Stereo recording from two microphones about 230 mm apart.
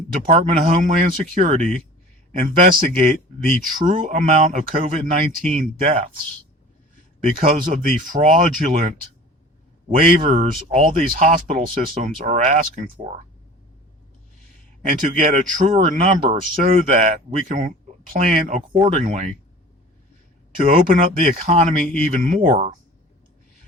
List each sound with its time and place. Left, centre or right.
0.1 s speech: right
7.3 s speech: right
10.0 s speech: right
14.8 s speech: right
20.6 s speech: right